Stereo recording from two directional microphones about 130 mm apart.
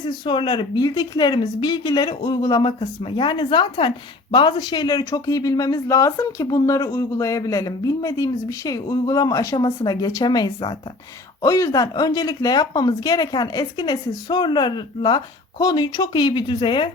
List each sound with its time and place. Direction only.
0.0 s a woman's voice: 35° left (ahead or behind)